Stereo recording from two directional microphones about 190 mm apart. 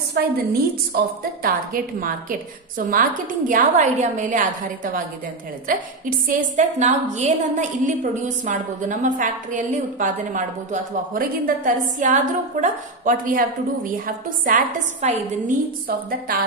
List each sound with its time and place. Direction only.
0.1 s a woman's voice: 55° right (ahead or behind)